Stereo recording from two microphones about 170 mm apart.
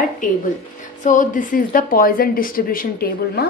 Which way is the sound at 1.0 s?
50° left (ahead or behind).